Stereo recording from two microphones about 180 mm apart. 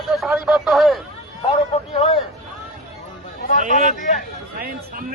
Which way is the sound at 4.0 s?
45° left (ahead or behind).